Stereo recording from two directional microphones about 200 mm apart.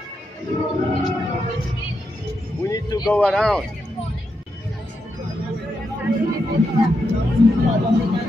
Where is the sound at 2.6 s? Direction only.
20° left (ahead or behind).